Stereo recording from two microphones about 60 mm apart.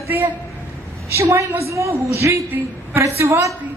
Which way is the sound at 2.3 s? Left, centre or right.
Right.